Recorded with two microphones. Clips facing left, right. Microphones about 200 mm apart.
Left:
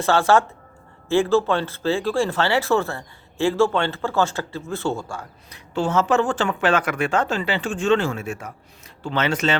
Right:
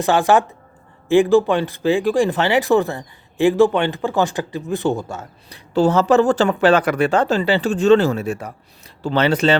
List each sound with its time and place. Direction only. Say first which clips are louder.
0.0 s speech: right 2 dB; 15° right (ahead or behind)
5.7 s speech: right 6 dB; 35° right (ahead or behind)